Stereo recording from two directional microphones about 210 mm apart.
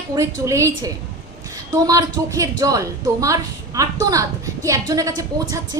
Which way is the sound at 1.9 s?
15° right (ahead or behind).